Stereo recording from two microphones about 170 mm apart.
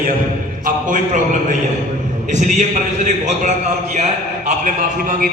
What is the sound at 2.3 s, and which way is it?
A man's voice, 45° right (ahead or behind).